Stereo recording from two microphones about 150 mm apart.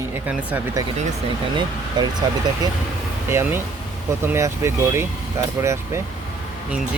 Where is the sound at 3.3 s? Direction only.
15° right (ahead or behind).